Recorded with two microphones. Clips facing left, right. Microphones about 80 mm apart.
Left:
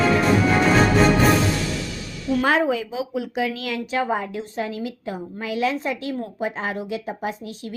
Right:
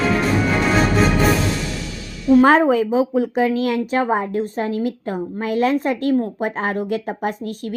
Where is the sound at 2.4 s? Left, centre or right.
Right.